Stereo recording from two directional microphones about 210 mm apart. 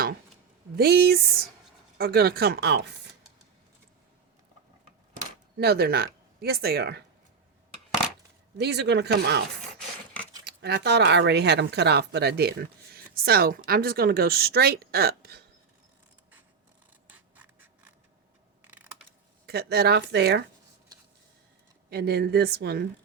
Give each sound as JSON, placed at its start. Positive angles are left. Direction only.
{"t": 0.8, "sound": "speech", "side_deg": -50}
{"t": 5.2, "sound": "speech", "side_deg": -50}
{"t": 8.5, "sound": "speech", "side_deg": -50}
{"t": 10.4, "sound": "speech", "side_deg": -50}
{"t": 17.1, "sound": "scratch", "side_deg": -10}
{"t": 18.6, "sound": "mechanisms", "side_deg": -10}
{"t": 19.5, "sound": "speech", "side_deg": -50}
{"t": 21.8, "sound": "speech", "side_deg": -50}